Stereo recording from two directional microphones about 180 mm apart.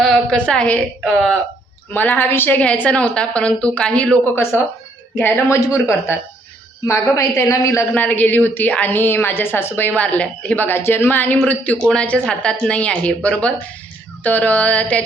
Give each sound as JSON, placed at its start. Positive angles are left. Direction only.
{"t": 0.0, "sound": "a woman's voice", "side_deg": 0}